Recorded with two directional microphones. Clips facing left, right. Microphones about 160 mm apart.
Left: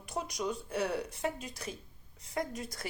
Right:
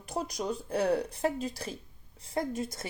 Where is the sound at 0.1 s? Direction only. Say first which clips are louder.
Right 2 dB; 35° right (ahead or behind).